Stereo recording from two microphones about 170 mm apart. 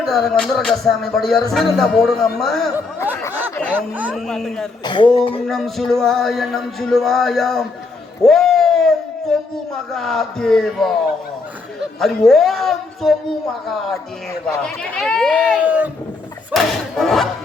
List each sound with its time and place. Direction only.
0.0 s music: centre (ahead or behind)
3.8 s speech: 10° right (ahead or behind)
4.1 s music: centre (ahead or behind)
4.8 s speech: 25° left (ahead or behind)
5.5 s music: centre (ahead or behind)
8.2 s a sound: centre (ahead or behind)
9.9 s music: centre (ahead or behind)
11.9 s music: centre (ahead or behind)
15.6 s speech: 10° right (ahead or behind)
16.5 s battle cry: centre (ahead or behind)